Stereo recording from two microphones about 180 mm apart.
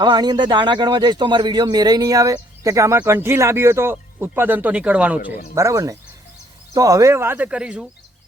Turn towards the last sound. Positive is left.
turn(degrees=-5)  # may be behind; listen again after turning